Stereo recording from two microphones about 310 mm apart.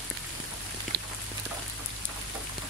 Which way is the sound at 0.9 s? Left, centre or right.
Right.